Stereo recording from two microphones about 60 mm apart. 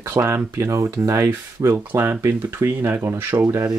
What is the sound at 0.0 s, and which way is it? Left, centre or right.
Speech, right.